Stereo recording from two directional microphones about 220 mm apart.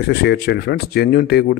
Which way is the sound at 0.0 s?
50° left (ahead or behind).